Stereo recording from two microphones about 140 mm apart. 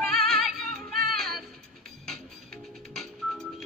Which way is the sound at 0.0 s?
Centre (ahead or behind).